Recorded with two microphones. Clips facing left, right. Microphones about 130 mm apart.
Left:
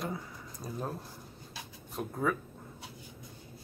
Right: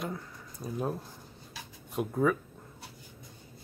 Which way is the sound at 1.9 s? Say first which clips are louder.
Right 5 dB; centre (ahead or behind).